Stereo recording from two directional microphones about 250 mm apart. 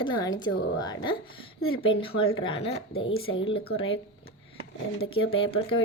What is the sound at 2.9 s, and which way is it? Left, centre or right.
Speech, left.